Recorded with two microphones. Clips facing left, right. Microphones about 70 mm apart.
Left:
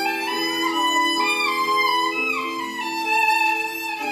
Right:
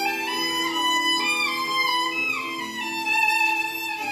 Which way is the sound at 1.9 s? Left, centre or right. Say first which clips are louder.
Left 4 dB; centre.